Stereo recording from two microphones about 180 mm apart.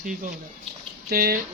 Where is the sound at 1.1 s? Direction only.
60° right (ahead or behind).